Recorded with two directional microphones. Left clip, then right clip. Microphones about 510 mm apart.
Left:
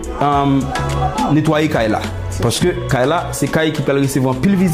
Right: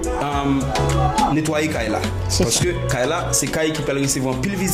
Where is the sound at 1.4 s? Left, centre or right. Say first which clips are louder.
Left 6 dB; left.